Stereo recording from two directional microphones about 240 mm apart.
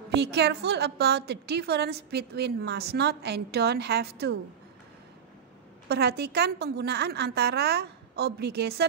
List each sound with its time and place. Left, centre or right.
0.1 s a woman's voice: right
5.9 s a woman's voice: right